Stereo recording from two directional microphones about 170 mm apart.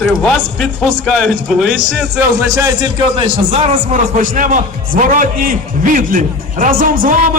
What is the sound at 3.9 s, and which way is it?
A man's voice, 50° right (ahead or behind).